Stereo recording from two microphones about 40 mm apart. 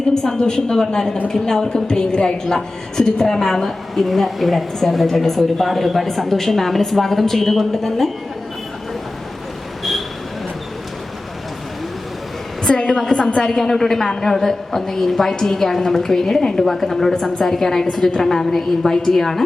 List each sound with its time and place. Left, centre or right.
0.1 s a woman's voice: centre
12.6 s a woman's voice: centre